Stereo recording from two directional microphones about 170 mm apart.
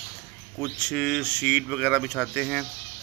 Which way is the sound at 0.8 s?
Centre (ahead or behind).